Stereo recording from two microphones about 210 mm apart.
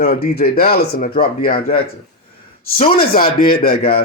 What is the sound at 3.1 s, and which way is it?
Speech, 45° left (ahead or behind).